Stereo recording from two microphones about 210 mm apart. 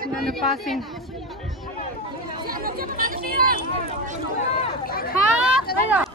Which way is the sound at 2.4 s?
45° right (ahead or behind).